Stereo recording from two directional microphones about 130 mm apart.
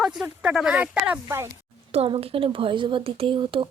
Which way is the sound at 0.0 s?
Centre (ahead or behind).